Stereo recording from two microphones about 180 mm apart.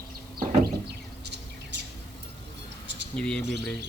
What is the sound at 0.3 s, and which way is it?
Bird, 60° right (ahead or behind).